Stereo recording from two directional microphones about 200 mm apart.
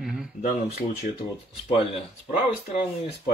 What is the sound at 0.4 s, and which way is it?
Speech, 45° left (ahead or behind).